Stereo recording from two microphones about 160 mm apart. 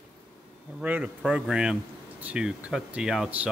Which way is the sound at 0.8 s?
10° right (ahead or behind).